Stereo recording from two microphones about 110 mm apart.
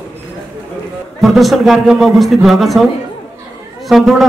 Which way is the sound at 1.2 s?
Centre (ahead or behind).